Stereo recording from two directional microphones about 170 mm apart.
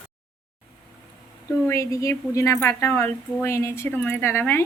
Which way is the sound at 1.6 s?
20° left (ahead or behind).